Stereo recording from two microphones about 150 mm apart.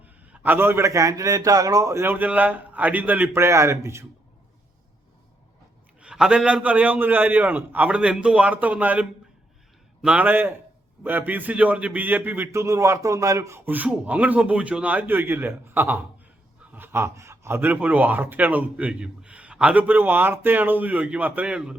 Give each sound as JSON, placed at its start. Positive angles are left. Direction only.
{"t": 0.4, "sound": "a man's voice", "side_deg": -15}
{"t": 6.0, "sound": "speech", "side_deg": -5}